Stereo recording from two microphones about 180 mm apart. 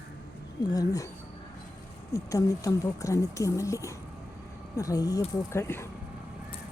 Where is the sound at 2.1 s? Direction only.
20° left (ahead or behind).